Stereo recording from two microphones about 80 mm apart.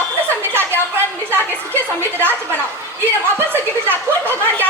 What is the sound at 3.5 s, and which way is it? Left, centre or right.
Chuckle, right.